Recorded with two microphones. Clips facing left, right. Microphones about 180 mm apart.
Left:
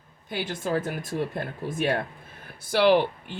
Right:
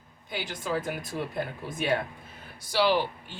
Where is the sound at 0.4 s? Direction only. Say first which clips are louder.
Left 4 dB; 50° left (ahead or behind).